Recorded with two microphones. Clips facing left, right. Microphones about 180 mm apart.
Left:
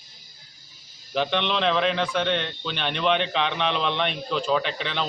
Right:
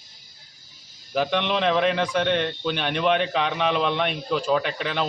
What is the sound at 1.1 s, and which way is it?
A man's voice, 10° right (ahead or behind).